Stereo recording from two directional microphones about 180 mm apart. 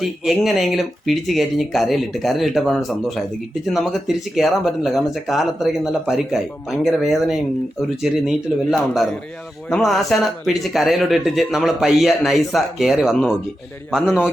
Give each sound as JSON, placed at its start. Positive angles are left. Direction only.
{"t": 0.0, "sound": "speech", "side_deg": 0}